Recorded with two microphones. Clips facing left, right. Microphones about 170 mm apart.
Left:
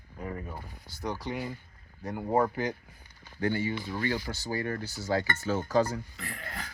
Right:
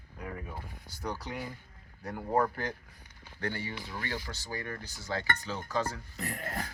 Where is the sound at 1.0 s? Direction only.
10° left (ahead or behind).